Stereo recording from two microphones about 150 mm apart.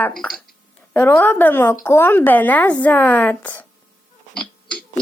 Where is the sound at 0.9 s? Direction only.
15° left (ahead or behind).